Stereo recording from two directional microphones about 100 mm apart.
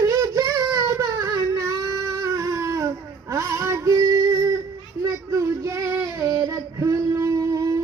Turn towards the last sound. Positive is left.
turn(degrees=-35)  # may be behind; listen again after turning